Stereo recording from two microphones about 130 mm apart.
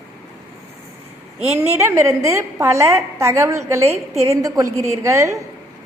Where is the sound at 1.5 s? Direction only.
20° right (ahead or behind).